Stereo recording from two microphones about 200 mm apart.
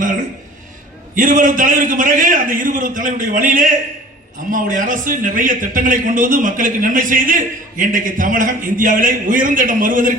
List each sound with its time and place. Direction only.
1.1 s a man's voice: 40° right (ahead or behind)